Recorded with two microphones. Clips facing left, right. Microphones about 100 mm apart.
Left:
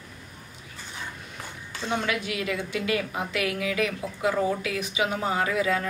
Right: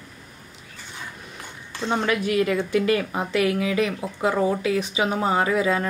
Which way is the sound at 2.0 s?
40° right (ahead or behind).